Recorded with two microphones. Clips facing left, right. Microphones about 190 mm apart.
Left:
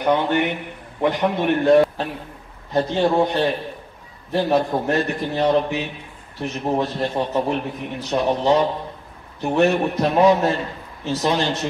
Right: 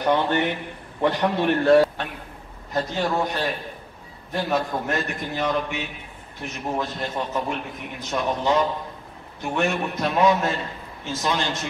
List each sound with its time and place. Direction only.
0.0 s a man's voice: 15° left (ahead or behind)
2.7 s a man's voice: 30° left (ahead or behind)